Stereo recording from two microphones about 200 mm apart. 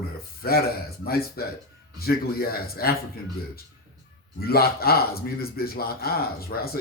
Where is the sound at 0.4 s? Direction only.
50° left (ahead or behind).